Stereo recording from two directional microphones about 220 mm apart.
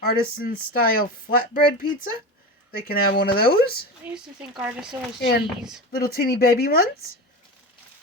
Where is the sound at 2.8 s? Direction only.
45° left (ahead or behind).